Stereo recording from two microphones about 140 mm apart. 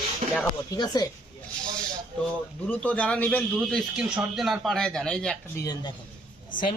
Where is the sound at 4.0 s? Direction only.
5° right (ahead or behind).